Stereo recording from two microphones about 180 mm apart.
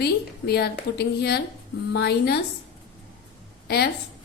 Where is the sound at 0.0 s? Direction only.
60° left (ahead or behind).